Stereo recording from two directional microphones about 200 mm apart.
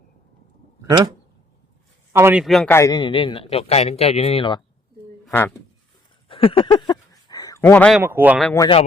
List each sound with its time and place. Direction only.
2.1 s speech: 10° right (ahead or behind)
2.4 s a man's voice: centre (ahead or behind)
2.6 s a man's voice: 15° left (ahead or behind)
5.2 s speech: 5° left (ahead or behind)
6.2 s a sound: 25° left (ahead or behind); by 8.0 s 5° left (ahead or behind)
8.0 s speech: 10° right (ahead or behind)
8.5 s a man's voice: 20° left (ahead or behind)